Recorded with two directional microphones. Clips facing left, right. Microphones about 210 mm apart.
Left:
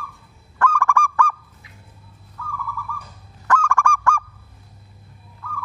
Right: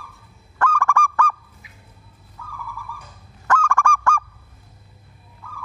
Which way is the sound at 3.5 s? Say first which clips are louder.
Even; 35° right (ahead or behind).